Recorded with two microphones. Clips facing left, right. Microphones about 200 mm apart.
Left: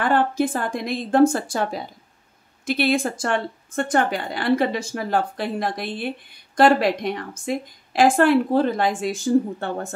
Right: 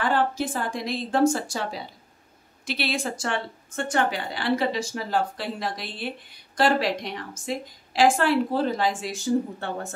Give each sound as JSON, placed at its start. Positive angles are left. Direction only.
{"t": 0.0, "sound": "a woman's voice", "side_deg": 55}